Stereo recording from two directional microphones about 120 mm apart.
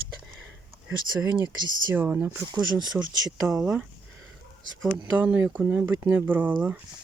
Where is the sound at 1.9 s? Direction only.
15° right (ahead or behind).